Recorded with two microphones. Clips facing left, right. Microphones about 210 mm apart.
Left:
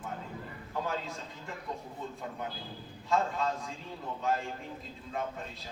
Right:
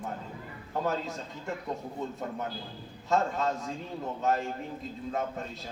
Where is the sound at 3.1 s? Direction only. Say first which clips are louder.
Right 3 dB; 45° right (ahead or behind).